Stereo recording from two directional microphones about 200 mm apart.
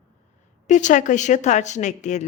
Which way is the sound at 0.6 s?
35° left (ahead or behind).